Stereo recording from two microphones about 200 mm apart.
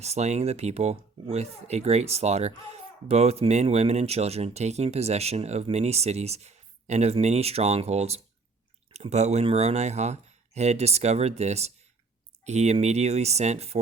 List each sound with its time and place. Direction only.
0.0 s speech: 35° right (ahead or behind)